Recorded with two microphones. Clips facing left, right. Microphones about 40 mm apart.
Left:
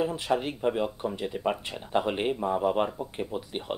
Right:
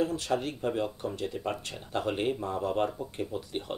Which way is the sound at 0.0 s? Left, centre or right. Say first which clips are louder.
Left 2 dB; centre.